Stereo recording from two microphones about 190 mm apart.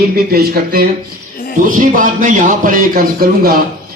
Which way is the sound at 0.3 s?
55° right (ahead or behind).